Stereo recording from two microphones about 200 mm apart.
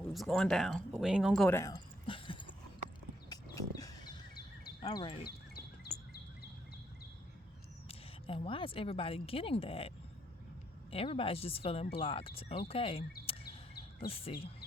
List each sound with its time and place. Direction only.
0.1 s speech: centre (ahead or behind); by 2.5 s 25° left (ahead or behind)
3.2 s wild animals: 15° left (ahead or behind)
4.8 s speech: 20° left (ahead or behind)
7.9 s speech: 25° left (ahead or behind)
10.9 s speech: 30° left (ahead or behind)
14.1 s speech: 30° left (ahead or behind)